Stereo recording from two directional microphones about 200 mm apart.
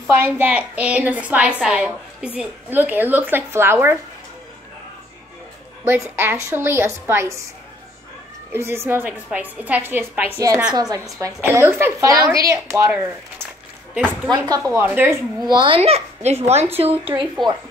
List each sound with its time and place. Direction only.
0.1 s a woman's voice: 10° right (ahead or behind)
5.9 s a woman's voice: 10° right (ahead or behind)
8.5 s a woman's voice: 10° right (ahead or behind)
14.3 s a woman's voice: 20° right (ahead or behind)
15.4 s speech: 25° right (ahead or behind)